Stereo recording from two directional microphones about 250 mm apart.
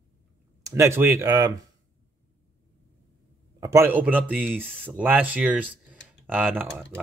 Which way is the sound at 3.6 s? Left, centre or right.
Centre.